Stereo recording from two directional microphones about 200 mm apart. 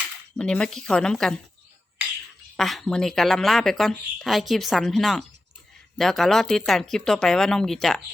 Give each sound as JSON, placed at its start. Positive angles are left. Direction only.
{"t": 0.3, "sound": "a woman's voice", "side_deg": 5}
{"t": 2.6, "sound": "a woman's voice", "side_deg": 0}